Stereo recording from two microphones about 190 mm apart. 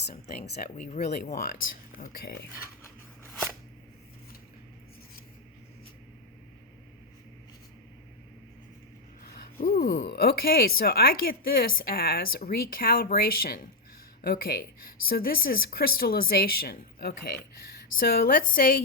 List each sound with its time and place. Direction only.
0.6 s a woman's voice: 45° left (ahead or behind)
9.2 s a woman's voice: 55° left (ahead or behind)